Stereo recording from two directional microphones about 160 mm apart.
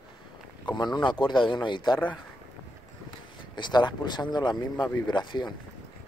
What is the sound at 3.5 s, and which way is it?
Speech, 30° left (ahead or behind).